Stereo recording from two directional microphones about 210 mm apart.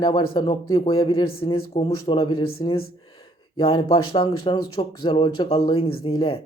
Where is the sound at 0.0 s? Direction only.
20° left (ahead or behind).